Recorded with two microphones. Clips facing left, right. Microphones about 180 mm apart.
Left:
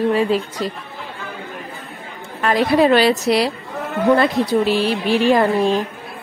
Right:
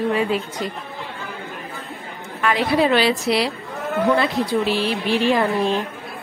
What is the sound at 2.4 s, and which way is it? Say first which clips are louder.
A woman's voice: left 4 dB; 40° left (ahead or behind).